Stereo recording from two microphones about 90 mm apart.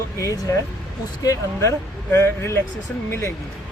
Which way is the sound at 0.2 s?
40° left (ahead or behind).